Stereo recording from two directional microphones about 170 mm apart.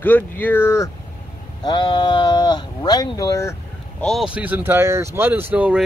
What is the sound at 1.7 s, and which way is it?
Speech, 30° left (ahead or behind).